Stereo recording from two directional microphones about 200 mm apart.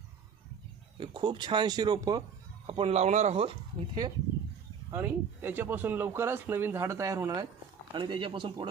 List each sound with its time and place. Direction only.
0.9 s speech: 25° right (ahead or behind)
4.9 s speech: 10° right (ahead or behind)